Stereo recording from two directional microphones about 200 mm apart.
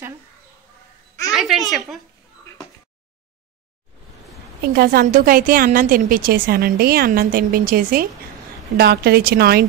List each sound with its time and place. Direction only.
1.3 s a child's voice: centre (ahead or behind)
4.7 s a woman's voice: 50° right (ahead or behind)